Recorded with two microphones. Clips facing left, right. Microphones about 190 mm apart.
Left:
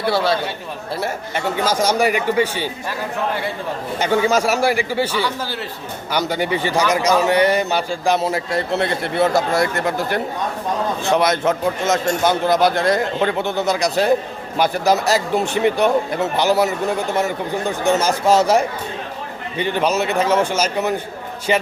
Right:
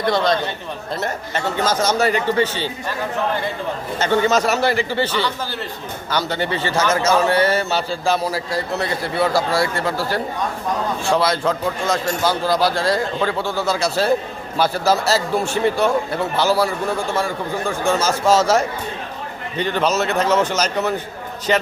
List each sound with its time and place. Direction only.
0.0 s a man's voice: 5° left (ahead or behind)
3.9 s a man's voice: 10° left (ahead or behind)